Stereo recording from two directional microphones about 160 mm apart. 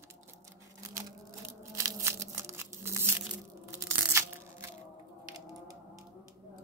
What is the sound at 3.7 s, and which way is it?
Tearing, 15° right (ahead or behind).